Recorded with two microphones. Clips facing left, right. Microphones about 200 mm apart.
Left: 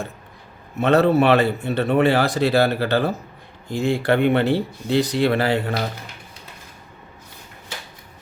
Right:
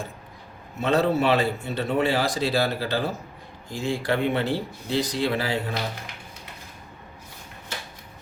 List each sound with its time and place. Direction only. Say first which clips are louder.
0.8 s a man's voice: left 6 dB; 65° left (ahead or behind)